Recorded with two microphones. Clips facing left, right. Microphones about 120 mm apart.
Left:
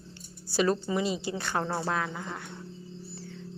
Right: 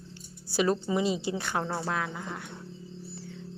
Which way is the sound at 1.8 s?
Centre (ahead or behind).